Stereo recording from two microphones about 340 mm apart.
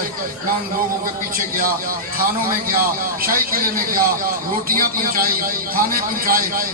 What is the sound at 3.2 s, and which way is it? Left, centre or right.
A man's voice, right.